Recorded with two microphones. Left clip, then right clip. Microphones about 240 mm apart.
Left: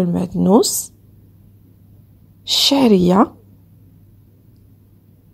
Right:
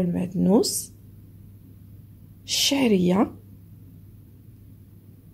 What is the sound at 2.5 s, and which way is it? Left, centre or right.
Speech, left.